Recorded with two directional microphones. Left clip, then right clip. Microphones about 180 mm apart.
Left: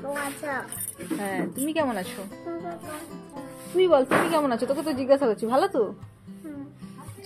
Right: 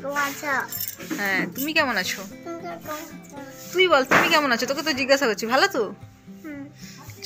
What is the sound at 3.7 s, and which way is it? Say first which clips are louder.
A woman's voice: right 2 dB; 25° left (ahead or behind).